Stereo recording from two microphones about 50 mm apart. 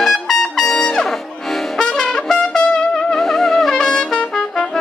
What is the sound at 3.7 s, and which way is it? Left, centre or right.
Trumpet, centre.